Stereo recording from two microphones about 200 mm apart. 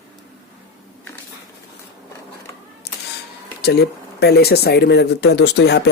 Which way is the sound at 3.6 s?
55° left (ahead or behind).